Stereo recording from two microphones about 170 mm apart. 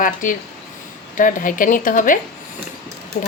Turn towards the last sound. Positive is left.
turn(degrees=50)  # may be behind; listen again after turning